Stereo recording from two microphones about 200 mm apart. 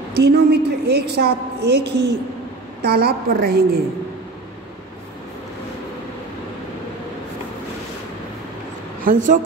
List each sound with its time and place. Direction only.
0.1 s a woman's voice: 55° right (ahead or behind)
9.0 s speech: 40° right (ahead or behind)